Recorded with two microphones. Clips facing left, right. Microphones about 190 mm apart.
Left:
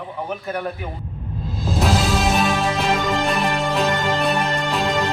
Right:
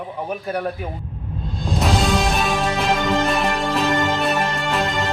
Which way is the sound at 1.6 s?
Centre (ahead or behind).